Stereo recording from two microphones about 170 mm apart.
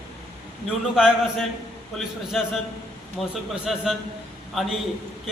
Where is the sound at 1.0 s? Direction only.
5° right (ahead or behind).